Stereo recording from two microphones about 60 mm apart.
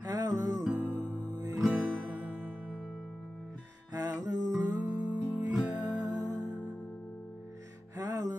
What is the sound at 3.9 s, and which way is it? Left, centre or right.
Music, right.